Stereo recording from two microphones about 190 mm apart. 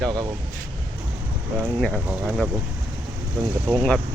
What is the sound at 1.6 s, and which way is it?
Speech, centre (ahead or behind).